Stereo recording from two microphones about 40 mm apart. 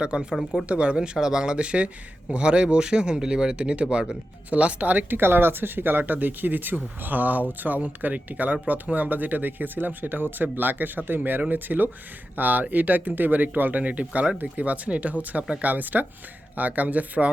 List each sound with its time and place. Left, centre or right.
0.0 s speech: right
0.9 s speech: centre
4.4 s speech: right
5.0 s speech: right